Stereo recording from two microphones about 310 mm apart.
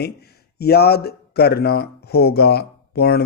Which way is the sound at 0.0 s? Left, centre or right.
Left.